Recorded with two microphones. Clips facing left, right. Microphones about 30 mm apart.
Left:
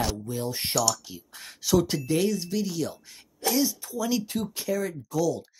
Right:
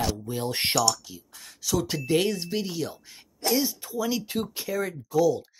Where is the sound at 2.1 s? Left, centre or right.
Right.